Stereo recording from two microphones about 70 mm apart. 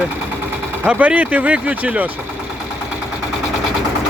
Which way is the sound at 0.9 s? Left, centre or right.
Right.